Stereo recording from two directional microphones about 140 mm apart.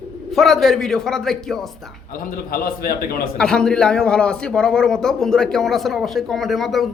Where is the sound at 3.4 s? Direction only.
5° left (ahead or behind).